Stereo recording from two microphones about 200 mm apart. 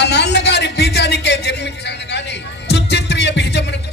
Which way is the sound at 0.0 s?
60° left (ahead or behind).